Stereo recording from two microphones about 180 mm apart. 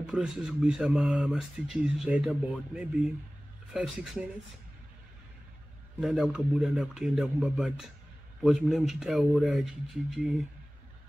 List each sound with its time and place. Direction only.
0.0 s speech: 5° right (ahead or behind)
5.9 s speech: centre (ahead or behind)